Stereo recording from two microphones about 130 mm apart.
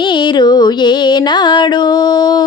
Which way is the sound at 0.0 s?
35° left (ahead or behind).